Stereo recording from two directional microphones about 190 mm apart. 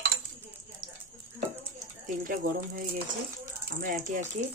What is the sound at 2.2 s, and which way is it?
Speech, 45° right (ahead or behind).